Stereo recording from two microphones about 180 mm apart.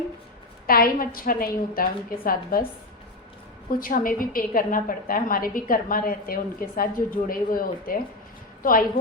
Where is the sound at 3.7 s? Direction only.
50° left (ahead or behind).